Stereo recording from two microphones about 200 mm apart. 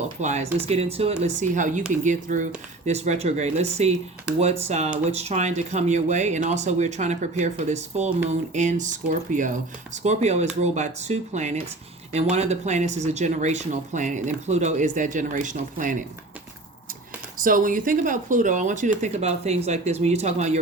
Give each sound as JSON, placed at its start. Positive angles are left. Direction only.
{"t": 0.2, "sound": "speech", "side_deg": -35}
{"t": 17.4, "sound": "speech", "side_deg": -40}